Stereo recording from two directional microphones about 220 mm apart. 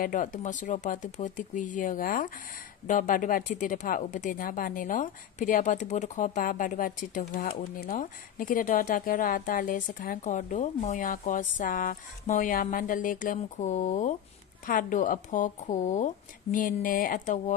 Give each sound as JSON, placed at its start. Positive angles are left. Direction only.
{"t": 0.0, "sound": "speech", "side_deg": 35}